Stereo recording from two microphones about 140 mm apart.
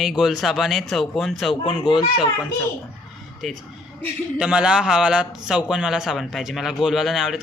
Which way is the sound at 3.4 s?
Centre (ahead or behind).